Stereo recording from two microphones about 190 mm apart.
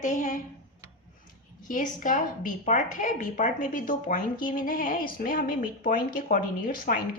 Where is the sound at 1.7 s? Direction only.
45° left (ahead or behind).